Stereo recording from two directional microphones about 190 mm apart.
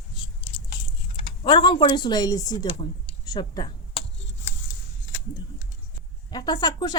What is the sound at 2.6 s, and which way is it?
Speech, 30° left (ahead or behind).